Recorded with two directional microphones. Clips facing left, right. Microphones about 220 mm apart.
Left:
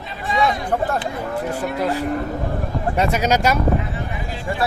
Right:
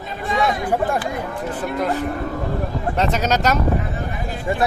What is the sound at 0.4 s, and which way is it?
Speech, 10° right (ahead or behind).